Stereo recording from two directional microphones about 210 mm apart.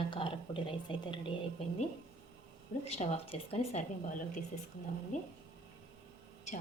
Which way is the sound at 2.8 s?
30° left (ahead or behind).